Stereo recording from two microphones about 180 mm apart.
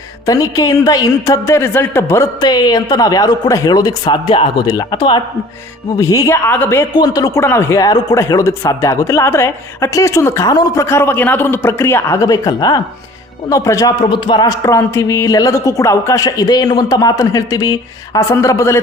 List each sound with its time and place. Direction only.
0.3 s a man's voice: 20° left (ahead or behind)